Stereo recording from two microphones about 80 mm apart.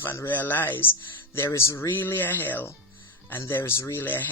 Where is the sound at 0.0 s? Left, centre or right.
Left.